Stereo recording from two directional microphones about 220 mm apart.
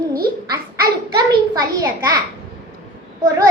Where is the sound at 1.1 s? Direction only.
15° right (ahead or behind).